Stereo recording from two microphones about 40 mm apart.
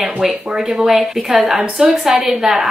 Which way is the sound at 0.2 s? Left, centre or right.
Centre.